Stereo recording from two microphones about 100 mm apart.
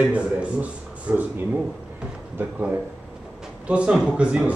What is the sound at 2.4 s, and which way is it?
Speech, 15° right (ahead or behind).